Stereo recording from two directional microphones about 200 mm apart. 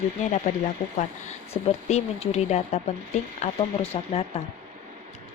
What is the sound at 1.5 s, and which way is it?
Speech, 30° left (ahead or behind).